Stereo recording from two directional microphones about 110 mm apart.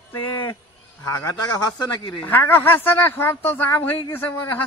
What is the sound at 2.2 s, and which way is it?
Speech, 20° left (ahead or behind).